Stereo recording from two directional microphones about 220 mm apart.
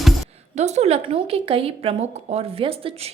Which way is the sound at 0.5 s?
30° right (ahead or behind).